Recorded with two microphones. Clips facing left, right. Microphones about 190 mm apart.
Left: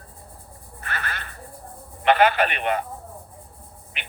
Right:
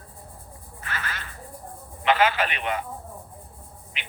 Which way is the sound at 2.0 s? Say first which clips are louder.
Left 3 dB; 60° left (ahead or behind).